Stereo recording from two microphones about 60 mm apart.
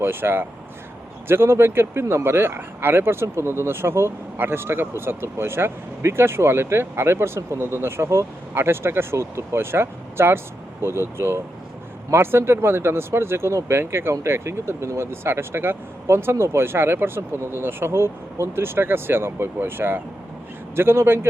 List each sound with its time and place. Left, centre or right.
0.0 s speech: right